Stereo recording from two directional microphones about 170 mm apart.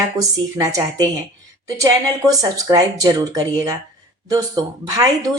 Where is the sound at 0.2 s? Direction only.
20° right (ahead or behind).